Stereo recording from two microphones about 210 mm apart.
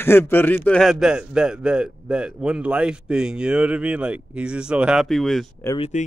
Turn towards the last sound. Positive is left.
turn(degrees=35)  # may be behind; listen again after turning